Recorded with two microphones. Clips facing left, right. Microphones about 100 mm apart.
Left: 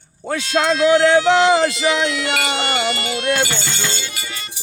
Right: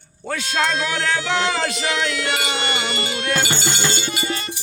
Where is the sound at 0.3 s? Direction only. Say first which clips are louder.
Left 4 dB; 20° left (ahead or behind).